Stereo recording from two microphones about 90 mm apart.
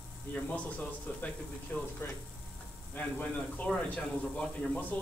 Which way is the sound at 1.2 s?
15° left (ahead or behind).